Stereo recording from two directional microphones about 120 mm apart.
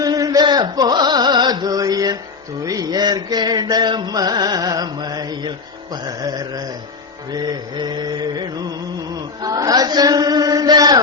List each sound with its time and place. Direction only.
0.0 s music: 30° right (ahead or behind)
7.3 s mantra: 35° right (ahead or behind)
9.1 s chant: 30° right (ahead or behind)